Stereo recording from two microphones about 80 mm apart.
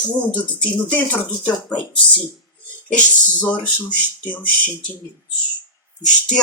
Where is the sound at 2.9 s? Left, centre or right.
Centre.